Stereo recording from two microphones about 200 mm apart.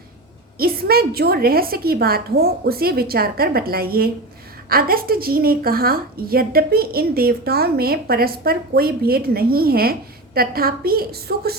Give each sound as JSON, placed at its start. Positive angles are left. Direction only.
{"t": 0.6, "sound": "a woman's voice", "side_deg": -50}